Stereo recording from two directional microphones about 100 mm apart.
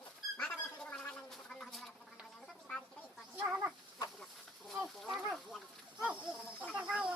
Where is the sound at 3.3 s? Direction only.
15° right (ahead or behind).